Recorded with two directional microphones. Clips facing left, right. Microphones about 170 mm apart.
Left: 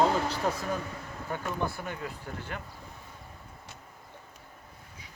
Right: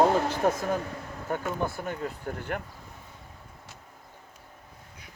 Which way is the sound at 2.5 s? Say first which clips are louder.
Right 8 dB; 55° right (ahead or behind).